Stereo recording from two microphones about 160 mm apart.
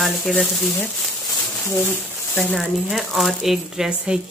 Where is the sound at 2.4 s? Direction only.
Centre (ahead or behind).